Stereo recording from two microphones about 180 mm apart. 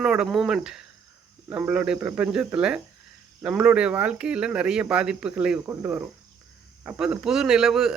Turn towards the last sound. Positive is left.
turn(degrees=0)  # may be behind; listen again after turning